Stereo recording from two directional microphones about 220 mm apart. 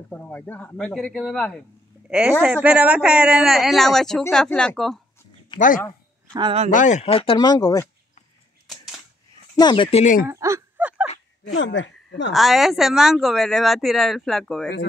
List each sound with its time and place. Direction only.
0.1 s speech: 5° left (ahead or behind)
5.5 s speech: 20° left (ahead or behind)
6.3 s speech: 25° right (ahead or behind)
6.7 s speech: 35° left (ahead or behind); by 7.9 s 15° left (ahead or behind)
8.6 s typewriter: centre (ahead or behind)
9.6 s speech: 20° left (ahead or behind)
10.2 s a sound: 15° right (ahead or behind)
11.5 s speech: 55° left (ahead or behind)
12.3 s speech: centre (ahead or behind)